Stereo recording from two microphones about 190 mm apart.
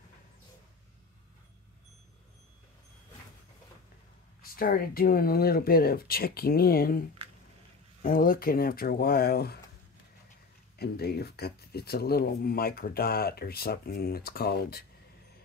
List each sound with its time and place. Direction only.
4.4 s speech: 50° left (ahead or behind)
10.8 s speech: 55° left (ahead or behind)